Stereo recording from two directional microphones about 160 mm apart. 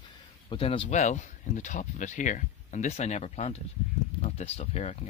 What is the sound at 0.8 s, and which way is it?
Speech, 50° left (ahead or behind).